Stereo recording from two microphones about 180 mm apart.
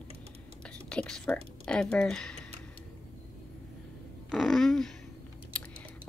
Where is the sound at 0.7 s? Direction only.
5° left (ahead or behind).